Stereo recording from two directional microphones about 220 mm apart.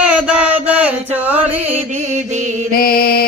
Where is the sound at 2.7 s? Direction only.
40° left (ahead or behind).